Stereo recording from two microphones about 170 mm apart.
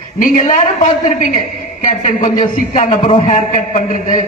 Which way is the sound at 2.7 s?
45° left (ahead or behind).